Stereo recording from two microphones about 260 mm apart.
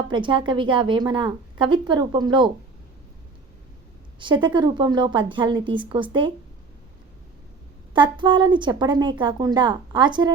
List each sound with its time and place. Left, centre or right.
0.1 s a woman's voice: centre
4.2 s a woman's voice: centre
7.9 s a woman's voice: centre